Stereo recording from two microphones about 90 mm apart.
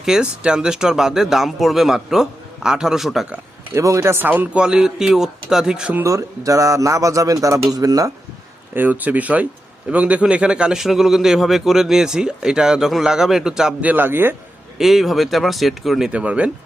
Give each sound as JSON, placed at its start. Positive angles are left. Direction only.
{"t": 0.0, "sound": "speech", "side_deg": -10}
{"t": 3.8, "sound": "a man's voice", "side_deg": -30}
{"t": 6.1, "sound": "speech", "side_deg": -40}
{"t": 8.7, "sound": "a man's voice", "side_deg": -20}
{"t": 13.8, "sound": "speech", "side_deg": -20}
{"t": 14.8, "sound": "speech", "side_deg": 0}